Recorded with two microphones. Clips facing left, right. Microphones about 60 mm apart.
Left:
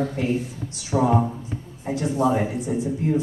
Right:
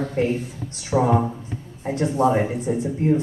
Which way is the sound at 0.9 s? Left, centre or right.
Centre.